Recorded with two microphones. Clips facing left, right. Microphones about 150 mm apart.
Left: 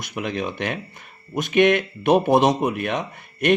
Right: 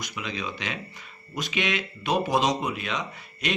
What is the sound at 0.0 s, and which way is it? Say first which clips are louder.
A man's voice: left 7 dB; 55° left (ahead or behind).